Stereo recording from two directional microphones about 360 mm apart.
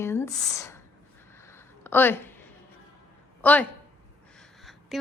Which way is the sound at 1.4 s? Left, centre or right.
Centre.